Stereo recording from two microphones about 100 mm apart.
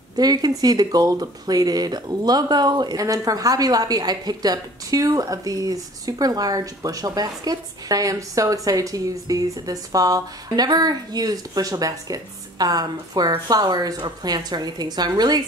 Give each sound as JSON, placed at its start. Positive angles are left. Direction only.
{"t": 0.1, "sound": "speech", "side_deg": -40}